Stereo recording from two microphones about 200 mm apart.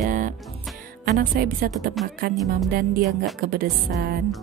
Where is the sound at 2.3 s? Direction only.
Centre (ahead or behind).